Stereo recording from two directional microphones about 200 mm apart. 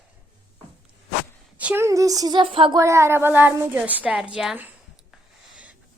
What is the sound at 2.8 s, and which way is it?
A woman's voice, 15° right (ahead or behind).